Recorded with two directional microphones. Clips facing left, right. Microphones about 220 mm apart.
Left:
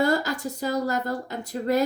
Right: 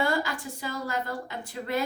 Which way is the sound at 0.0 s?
40° left (ahead or behind).